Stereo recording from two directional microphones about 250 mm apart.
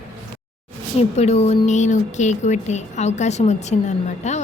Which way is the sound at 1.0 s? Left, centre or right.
Left.